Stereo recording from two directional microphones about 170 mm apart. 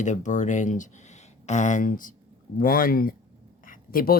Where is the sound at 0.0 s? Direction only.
45° left (ahead or behind).